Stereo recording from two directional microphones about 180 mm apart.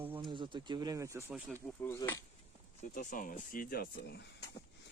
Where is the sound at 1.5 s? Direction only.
15° left (ahead or behind).